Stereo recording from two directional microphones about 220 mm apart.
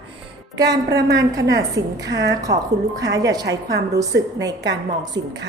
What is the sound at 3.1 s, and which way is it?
Speech, 15° right (ahead or behind).